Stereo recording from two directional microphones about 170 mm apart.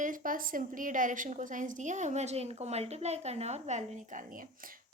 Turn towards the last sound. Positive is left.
turn(degrees=-55)  # may be behind; listen again after turning